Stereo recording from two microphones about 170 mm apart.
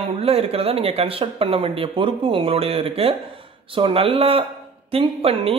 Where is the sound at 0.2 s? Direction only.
35° right (ahead or behind).